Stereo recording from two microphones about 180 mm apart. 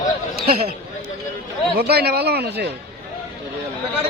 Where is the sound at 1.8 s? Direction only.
60° right (ahead or behind).